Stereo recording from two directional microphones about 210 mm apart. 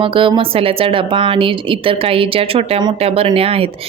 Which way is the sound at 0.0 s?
25° right (ahead or behind).